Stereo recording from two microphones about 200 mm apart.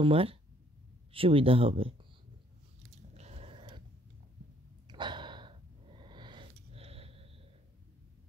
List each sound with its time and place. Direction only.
0.0 s speech: 30° right (ahead or behind)
3.2 s a sound: 30° right (ahead or behind)
4.8 s gasp: 20° right (ahead or behind)